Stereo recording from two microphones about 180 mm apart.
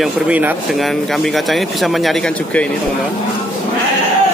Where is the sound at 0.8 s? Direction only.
Centre (ahead or behind).